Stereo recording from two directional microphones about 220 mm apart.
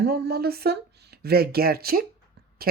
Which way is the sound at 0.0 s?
45° right (ahead or behind).